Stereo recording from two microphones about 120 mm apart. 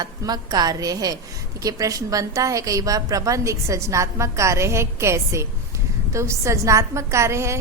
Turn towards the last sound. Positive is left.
turn(degrees=-25)  # may be behind; listen again after turning